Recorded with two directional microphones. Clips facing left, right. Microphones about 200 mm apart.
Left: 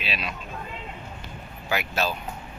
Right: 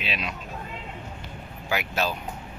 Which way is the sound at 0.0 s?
20° right (ahead or behind).